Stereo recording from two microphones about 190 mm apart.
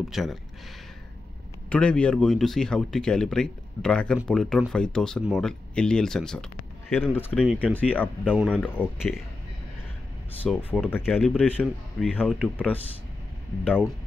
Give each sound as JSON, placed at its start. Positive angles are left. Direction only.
{"t": 0.1, "sound": "speech", "side_deg": 0}
{"t": 1.7, "sound": "speech", "side_deg": 5}
{"t": 7.3, "sound": "speech", "side_deg": -5}
{"t": 7.6, "sound": "speech", "side_deg": 10}
{"t": 10.7, "sound": "speech", "side_deg": 10}